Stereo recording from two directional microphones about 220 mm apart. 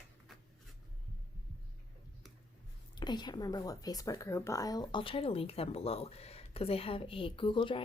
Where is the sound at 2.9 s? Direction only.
20° left (ahead or behind).